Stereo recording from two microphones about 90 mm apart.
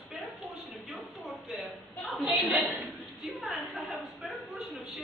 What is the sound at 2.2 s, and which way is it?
Speech, 20° right (ahead or behind).